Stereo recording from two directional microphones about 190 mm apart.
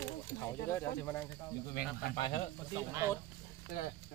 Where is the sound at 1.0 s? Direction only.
10° left (ahead or behind).